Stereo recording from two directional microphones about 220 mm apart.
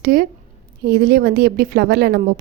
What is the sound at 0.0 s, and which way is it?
A woman's voice, 40° right (ahead or behind).